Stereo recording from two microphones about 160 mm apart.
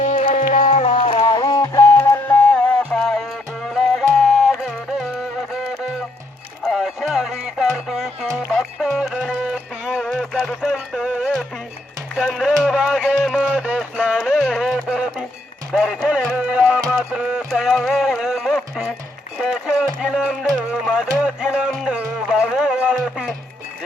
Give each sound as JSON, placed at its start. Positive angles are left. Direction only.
{"t": 0.0, "sound": "music", "side_deg": 45}
{"t": 0.6, "sound": "music", "side_deg": 45}
{"t": 6.6, "sound": "music", "side_deg": 0}
{"t": 12.1, "sound": "a sound", "side_deg": 0}
{"t": 15.7, "sound": "music", "side_deg": 0}
{"t": 19.4, "sound": "a sound", "side_deg": -5}
{"t": 20.6, "sound": "music", "side_deg": -5}